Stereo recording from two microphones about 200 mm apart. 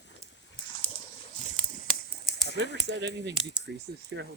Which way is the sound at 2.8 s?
60° right (ahead or behind).